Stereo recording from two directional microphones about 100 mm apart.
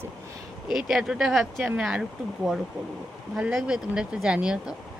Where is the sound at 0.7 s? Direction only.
5° right (ahead or behind).